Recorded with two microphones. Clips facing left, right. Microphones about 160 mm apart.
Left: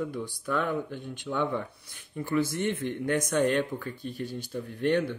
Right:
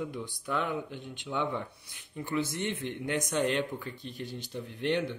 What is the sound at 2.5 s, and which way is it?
Speech, 50° left (ahead or behind).